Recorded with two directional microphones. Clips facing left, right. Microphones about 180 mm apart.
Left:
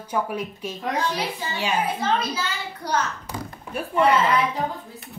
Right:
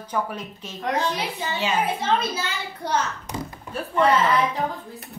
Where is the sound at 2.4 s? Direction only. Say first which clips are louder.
Even; 25° right (ahead or behind).